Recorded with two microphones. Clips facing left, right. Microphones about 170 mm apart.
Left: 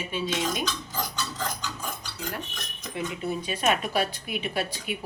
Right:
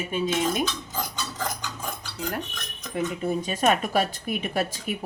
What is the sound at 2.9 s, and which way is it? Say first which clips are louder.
Speech: right 4 dB; 45° right (ahead or behind).